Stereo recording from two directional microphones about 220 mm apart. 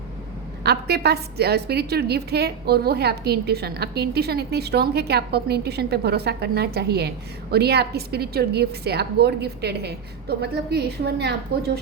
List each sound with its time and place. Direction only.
0.6 s a woman's voice: 45° right (ahead or behind)